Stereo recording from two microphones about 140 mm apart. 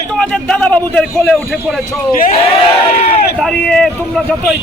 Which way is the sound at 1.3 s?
Centre (ahead or behind).